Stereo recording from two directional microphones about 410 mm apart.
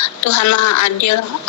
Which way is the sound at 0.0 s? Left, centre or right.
Left.